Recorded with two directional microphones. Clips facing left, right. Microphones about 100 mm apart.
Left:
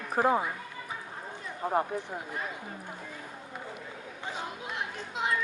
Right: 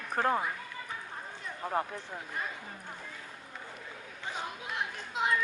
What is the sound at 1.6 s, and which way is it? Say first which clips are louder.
Speech: left 5 dB; 20° left (ahead or behind).